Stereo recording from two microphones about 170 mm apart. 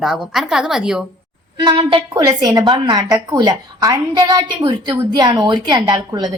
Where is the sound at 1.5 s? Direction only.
30° right (ahead or behind).